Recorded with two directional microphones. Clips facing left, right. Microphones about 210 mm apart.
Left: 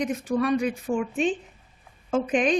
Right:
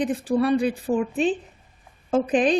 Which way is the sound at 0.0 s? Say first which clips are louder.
Right 3 dB; 30° right (ahead or behind).